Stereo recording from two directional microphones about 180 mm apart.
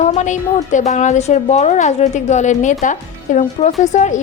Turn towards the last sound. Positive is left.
turn(degrees=40)  # may be behind; listen again after turning